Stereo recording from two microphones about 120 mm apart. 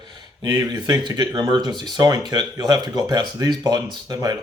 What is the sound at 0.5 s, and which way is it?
Speech, 30° right (ahead or behind).